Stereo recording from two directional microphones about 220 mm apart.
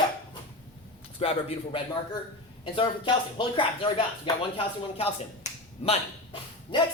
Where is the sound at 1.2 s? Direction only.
25° left (ahead or behind).